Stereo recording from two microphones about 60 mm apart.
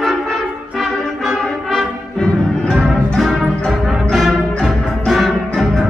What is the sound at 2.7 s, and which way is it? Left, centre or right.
Music, centre.